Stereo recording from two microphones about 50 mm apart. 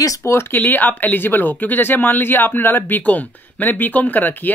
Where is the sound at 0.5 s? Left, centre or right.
Left.